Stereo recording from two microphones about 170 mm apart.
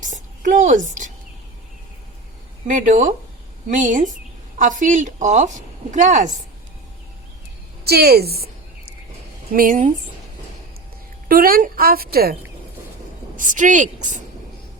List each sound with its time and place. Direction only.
0.0 s a sound: 50° right (ahead or behind)
2.6 s a woman's voice: 50° right (ahead or behind)
7.9 s a woman's voice: 70° right (ahead or behind)
9.5 s a woman's voice: 55° right (ahead or behind)
11.3 s a woman's voice: 60° right (ahead or behind)
13.3 s a woman's voice: 50° right (ahead or behind)